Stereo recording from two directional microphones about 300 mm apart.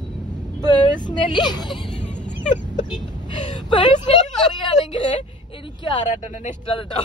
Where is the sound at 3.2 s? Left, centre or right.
Centre.